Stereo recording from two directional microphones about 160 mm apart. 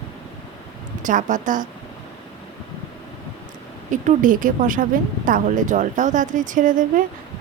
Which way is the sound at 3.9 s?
55° right (ahead or behind).